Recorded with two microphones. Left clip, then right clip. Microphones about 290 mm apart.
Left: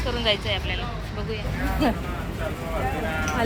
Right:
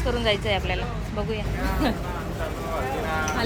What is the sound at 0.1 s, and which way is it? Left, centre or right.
Speech, centre.